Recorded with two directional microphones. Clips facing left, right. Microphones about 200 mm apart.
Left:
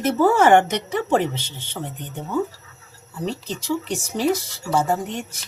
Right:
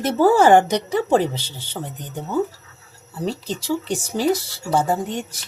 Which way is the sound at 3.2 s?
35° right (ahead or behind).